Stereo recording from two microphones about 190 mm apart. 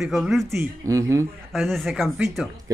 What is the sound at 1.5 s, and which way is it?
Speech, centre (ahead or behind).